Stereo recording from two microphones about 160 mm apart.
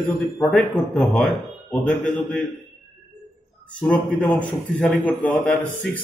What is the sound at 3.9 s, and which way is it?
A man's voice, 10° left (ahead or behind).